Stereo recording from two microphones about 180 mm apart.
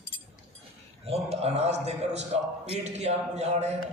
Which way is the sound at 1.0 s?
35° right (ahead or behind).